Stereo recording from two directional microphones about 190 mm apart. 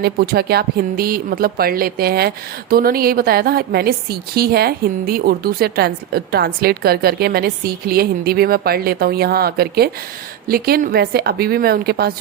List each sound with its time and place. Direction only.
0.0 s a woman's voice: 55° right (ahead or behind)